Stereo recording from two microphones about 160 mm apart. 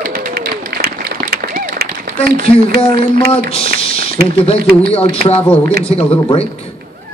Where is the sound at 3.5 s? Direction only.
35° left (ahead or behind).